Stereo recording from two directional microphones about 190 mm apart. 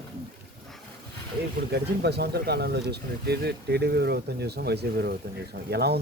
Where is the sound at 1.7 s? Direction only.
60° right (ahead or behind).